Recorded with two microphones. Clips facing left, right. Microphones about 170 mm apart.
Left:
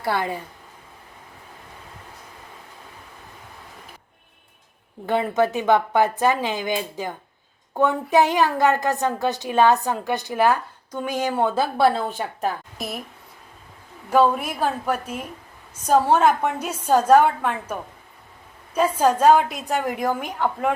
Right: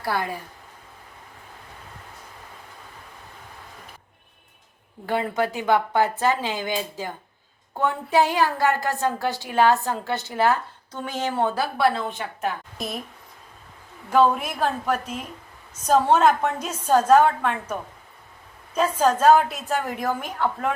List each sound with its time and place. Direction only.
0.0 s speech: 25° left (ahead or behind)
5.0 s a woman's voice: 20° left (ahead or behind)
11.5 s a woman's voice: 30° left (ahead or behind)
12.7 s speech: centre (ahead or behind)
14.1 s a woman's voice: 10° left (ahead or behind)